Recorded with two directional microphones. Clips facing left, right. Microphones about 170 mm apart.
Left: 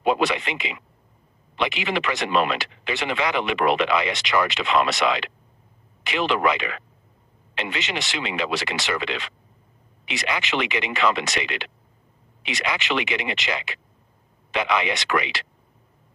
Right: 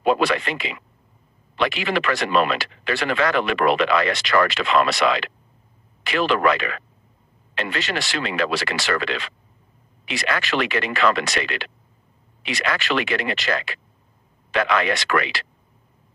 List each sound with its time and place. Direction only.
0.0 s speech: 15° left (ahead or behind)